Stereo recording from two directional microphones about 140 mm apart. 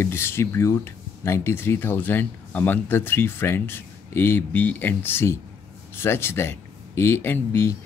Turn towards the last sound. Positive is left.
turn(degrees=15)  # may be behind; listen again after turning